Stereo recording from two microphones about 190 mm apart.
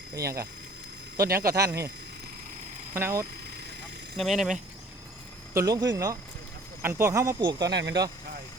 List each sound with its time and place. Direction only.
0.1 s speech: 15° right (ahead or behind)
2.9 s speech: 15° right (ahead or behind)
4.2 s speech: centre (ahead or behind)
5.5 s speech: 20° right (ahead or behind)
7.7 s speech: 65° right (ahead or behind)